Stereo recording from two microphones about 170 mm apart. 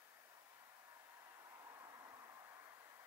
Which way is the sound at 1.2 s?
15° right (ahead or behind).